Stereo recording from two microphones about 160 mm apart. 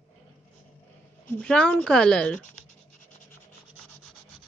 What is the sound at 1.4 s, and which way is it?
Speech, 5° left (ahead or behind).